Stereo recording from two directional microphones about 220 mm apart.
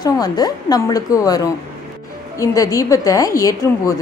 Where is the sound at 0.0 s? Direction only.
15° left (ahead or behind).